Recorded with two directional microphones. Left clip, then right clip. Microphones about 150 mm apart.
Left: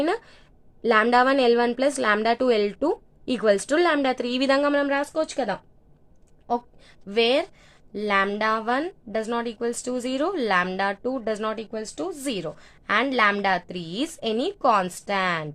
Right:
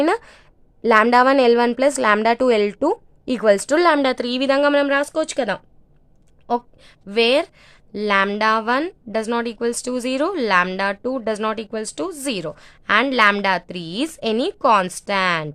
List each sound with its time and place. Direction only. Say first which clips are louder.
0.0 s a woman's voice: right 6 dB; 30° right (ahead or behind)
4.7 s a woman's voice: right 5 dB; 35° right (ahead or behind)
12.2 s a woman's voice: right 4 dB; 30° right (ahead or behind)